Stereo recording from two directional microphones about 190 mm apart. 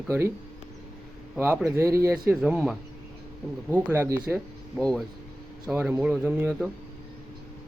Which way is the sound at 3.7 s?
10° right (ahead or behind).